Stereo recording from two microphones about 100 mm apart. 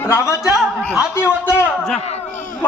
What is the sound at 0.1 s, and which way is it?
Speech, 30° left (ahead or behind).